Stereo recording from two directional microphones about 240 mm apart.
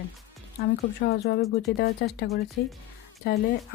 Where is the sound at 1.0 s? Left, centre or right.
Left.